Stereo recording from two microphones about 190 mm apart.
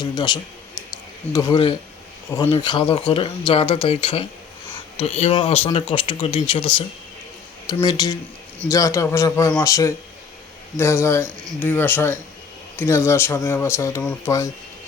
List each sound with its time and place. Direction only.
0.0 s a man's voice: 20° left (ahead or behind)
0.9 s a sound: 20° left (ahead or behind)
2.3 s speech: 20° left (ahead or behind)